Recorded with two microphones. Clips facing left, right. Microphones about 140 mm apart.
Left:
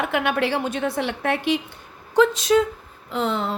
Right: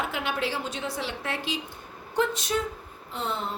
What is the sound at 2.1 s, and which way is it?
Speech, 90° left.